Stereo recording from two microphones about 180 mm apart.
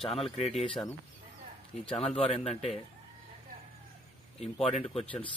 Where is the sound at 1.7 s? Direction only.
5° left (ahead or behind).